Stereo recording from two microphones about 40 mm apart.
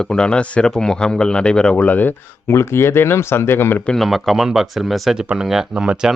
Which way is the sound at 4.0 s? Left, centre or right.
Centre.